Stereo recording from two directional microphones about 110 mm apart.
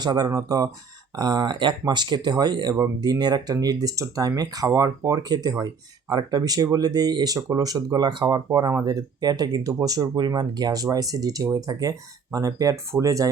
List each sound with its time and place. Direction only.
0.0 s speech: 40° right (ahead or behind)